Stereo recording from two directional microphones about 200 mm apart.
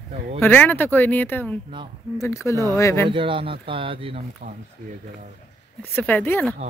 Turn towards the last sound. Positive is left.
turn(degrees=10)  # may be behind; listen again after turning